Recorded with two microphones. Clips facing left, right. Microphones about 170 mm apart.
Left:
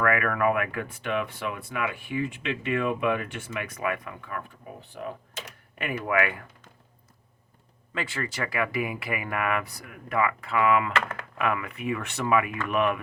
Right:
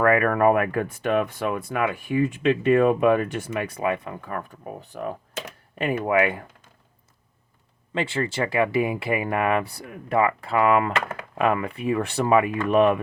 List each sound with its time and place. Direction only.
0.0 s speech: 35° right (ahead or behind)
5.7 s speech: 30° right (ahead or behind)
7.9 s speech: 25° right (ahead or behind)
10.9 s speech: 15° right (ahead or behind)
11.3 s speech: 30° right (ahead or behind)